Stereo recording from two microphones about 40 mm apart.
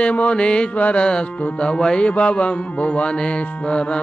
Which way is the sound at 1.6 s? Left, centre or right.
Left.